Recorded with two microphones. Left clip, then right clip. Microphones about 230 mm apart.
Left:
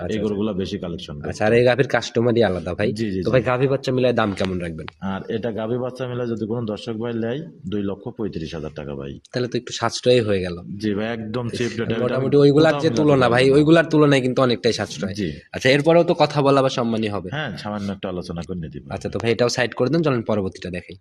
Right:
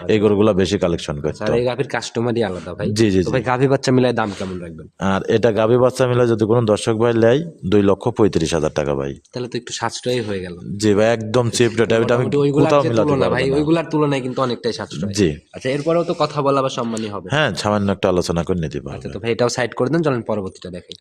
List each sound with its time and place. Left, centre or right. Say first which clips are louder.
0.1 s a man's voice: right 12 dB; right
1.4 s a man's voice: left 4 dB; left
2.0 s speech: left 2 dB; centre
2.9 s a man's voice: right 10 dB; right
3.4 s speech: right 2 dB; centre
3.7 s speech: right 4 dB; right
5.0 s a man's voice: right 10 dB; right
9.4 s speech: even; centre
10.8 s a man's voice: right 10 dB; right
12.4 s a man's voice: left 2 dB; centre
17.3 s a man's voice: right 10 dB; right
19.4 s speech: right 3 dB; centre
20.2 s speech: even; centre